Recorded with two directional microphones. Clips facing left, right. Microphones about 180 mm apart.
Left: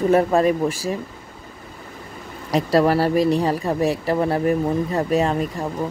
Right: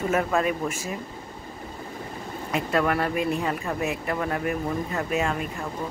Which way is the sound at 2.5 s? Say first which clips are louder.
Left 7 dB; 35° left (ahead or behind).